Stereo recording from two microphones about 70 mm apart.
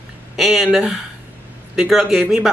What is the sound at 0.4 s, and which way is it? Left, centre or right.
A woman's voice, centre.